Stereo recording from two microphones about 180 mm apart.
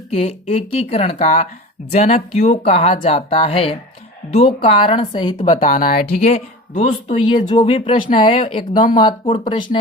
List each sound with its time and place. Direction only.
0.1 s speech: 35° left (ahead or behind)
5.4 s speech: 45° left (ahead or behind); by 9.6 s 25° left (ahead or behind)